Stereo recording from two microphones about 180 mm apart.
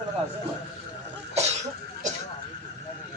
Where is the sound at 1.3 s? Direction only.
40° right (ahead or behind).